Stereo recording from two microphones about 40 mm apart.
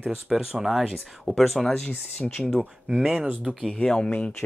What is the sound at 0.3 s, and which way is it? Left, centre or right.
Speech, centre.